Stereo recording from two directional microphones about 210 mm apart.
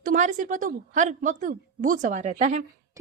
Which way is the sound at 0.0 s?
40° right (ahead or behind).